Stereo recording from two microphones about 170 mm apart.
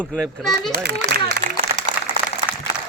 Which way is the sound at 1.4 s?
50° right (ahead or behind).